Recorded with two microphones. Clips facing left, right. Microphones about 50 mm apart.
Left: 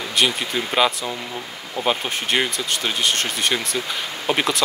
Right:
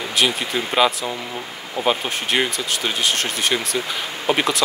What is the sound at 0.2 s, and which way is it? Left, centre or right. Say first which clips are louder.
Speech: even; centre.